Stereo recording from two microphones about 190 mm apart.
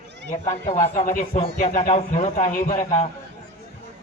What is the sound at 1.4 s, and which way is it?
A man's voice, 30° left (ahead or behind).